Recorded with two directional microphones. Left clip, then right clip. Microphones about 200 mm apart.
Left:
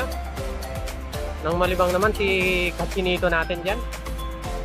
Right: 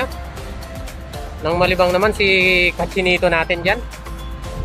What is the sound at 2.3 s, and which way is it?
Speech, 50° right (ahead or behind).